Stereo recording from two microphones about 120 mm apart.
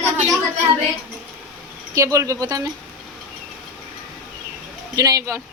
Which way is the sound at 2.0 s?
25° right (ahead or behind).